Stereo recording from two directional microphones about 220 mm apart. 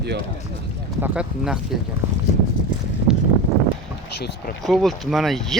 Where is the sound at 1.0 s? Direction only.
5° right (ahead or behind).